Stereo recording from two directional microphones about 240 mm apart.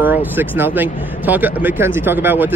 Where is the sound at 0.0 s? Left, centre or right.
Centre.